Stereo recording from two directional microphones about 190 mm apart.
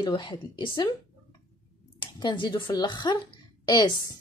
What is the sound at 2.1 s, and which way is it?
A woman's voice, 25° left (ahead or behind).